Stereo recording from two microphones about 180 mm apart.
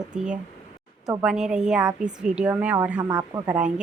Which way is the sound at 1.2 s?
5° right (ahead or behind).